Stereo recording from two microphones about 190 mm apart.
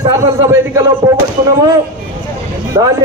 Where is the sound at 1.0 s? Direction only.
20° right (ahead or behind).